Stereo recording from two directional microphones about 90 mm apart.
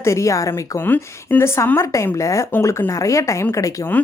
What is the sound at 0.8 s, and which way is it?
Speech, 25° left (ahead or behind).